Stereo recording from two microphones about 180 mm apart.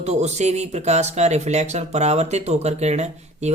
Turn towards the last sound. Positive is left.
turn(degrees=-40)  # may be behind; listen again after turning